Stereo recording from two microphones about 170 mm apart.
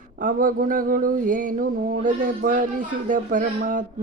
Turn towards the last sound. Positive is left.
turn(degrees=-50)  # may be behind; listen again after turning